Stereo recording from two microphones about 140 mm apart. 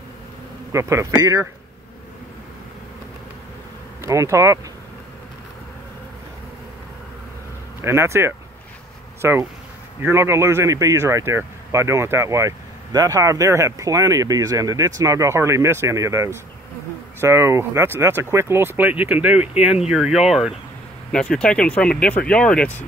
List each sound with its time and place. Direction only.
0.7 s speech: 20° right (ahead or behind)
4.0 s speech: 20° right (ahead or behind)
7.8 s speech: 20° right (ahead or behind); by 22.8 s 10° left (ahead or behind)